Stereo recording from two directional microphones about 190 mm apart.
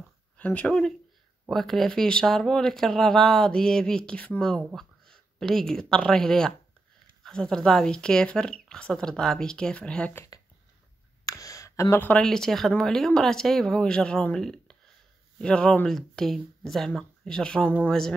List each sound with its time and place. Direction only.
0.4 s speech: 10° left (ahead or behind)